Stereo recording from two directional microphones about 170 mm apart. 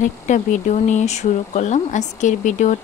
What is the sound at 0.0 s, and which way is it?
Speech, 45° left (ahead or behind).